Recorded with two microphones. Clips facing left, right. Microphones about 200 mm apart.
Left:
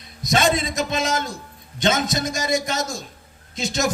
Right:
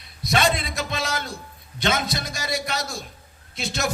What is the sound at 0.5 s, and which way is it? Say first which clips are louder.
Speech: left 5 dB; 20° left (ahead or behind).